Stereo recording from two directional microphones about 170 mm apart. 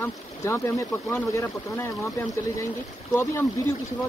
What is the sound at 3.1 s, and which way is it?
Speech, 15° left (ahead or behind).